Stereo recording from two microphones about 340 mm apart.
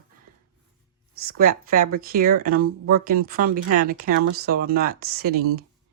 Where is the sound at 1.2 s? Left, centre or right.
Right.